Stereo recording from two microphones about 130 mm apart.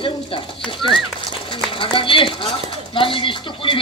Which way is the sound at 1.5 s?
40° left (ahead or behind).